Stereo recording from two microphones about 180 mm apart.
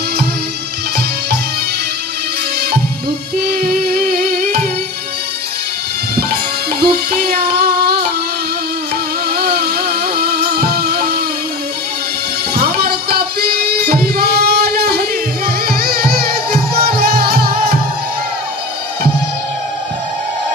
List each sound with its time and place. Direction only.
3.4 s music: 55° right (ahead or behind)
6.7 s music: 60° right (ahead or behind)
9.3 s music: 60° right (ahead or behind)
12.5 s music: 60° right (ahead or behind)